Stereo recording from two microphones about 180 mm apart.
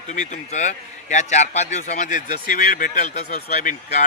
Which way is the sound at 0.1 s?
40° left (ahead or behind).